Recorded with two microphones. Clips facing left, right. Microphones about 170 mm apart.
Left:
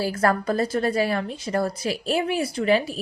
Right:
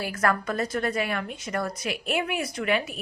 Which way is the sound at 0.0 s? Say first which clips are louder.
Left 4 dB; 30° left (ahead or behind).